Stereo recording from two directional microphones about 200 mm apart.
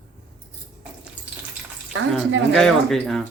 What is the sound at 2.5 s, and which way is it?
Speech, 5° left (ahead or behind).